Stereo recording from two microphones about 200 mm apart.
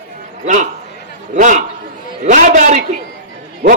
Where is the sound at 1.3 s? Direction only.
35° right (ahead or behind).